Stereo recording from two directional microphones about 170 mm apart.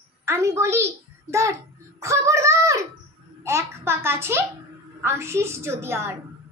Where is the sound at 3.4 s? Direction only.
15° right (ahead or behind).